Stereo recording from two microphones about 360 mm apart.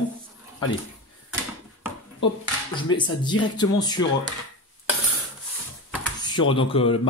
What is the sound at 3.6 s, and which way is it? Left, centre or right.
Speech, centre.